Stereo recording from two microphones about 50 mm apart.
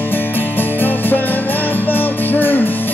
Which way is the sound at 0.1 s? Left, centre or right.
Left.